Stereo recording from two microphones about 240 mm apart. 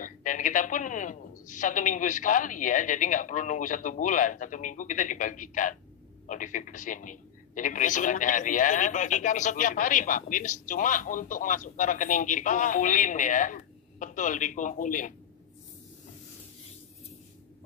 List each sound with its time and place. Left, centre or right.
0.0 s a woman's voice: left